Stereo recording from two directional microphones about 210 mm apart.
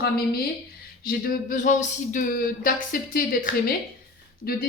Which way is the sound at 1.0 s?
35° left (ahead or behind).